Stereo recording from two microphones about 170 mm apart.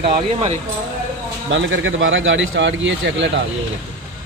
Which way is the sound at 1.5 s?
90° right.